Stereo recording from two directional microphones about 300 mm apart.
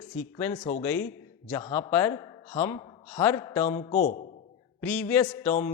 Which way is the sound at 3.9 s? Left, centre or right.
Left.